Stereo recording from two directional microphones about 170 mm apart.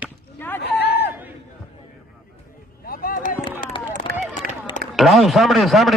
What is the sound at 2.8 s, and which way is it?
Vehicle, 55° left (ahead or behind).